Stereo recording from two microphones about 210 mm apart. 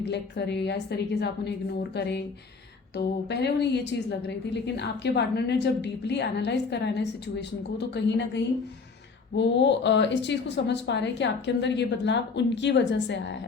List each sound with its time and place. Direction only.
0.0 s a woman's voice: 55° left (ahead or behind)